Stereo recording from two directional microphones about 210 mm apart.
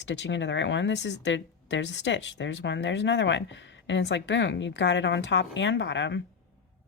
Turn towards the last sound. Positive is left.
turn(degrees=60)  # may be behind; listen again after turning